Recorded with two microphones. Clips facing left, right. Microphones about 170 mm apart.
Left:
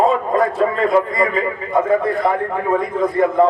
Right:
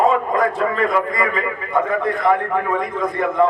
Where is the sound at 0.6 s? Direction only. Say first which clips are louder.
Left 3 dB; 30° left (ahead or behind).